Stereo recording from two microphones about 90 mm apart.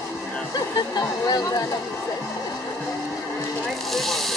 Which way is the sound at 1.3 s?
45° left (ahead or behind).